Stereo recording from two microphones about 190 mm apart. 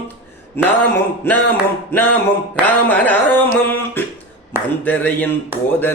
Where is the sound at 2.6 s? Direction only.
10° left (ahead or behind).